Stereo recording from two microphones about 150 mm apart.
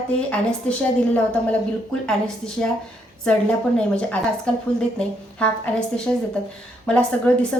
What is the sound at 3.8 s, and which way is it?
Speech, 5° left (ahead or behind).